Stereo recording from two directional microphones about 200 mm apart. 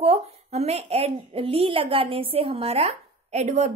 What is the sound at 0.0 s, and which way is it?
A woman's voice, 30° right (ahead or behind).